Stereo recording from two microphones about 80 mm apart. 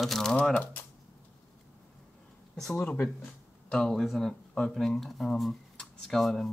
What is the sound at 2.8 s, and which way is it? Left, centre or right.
Speech, left.